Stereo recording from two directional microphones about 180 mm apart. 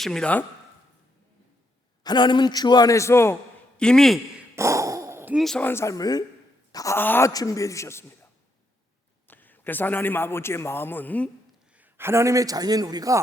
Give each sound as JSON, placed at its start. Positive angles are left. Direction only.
{"t": 0.0, "sound": "speech", "side_deg": 5}
{"t": 2.0, "sound": "a man's voice", "side_deg": 25}
{"t": 3.8, "sound": "speech", "side_deg": 5}
{"t": 4.5, "sound": "a sound", "side_deg": -15}
{"t": 5.4, "sound": "speech", "side_deg": 5}
{"t": 9.2, "sound": "a man's voice", "side_deg": 10}
{"t": 11.8, "sound": "a man's voice", "side_deg": -15}